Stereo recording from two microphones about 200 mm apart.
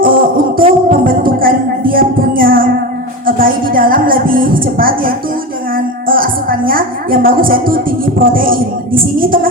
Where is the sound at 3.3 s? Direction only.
45° right (ahead or behind).